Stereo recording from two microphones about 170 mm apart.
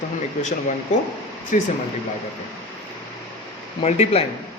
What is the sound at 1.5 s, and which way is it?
Speech, 50° left (ahead or behind).